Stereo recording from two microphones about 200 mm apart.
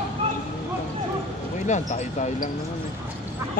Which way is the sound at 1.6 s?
35° left (ahead or behind).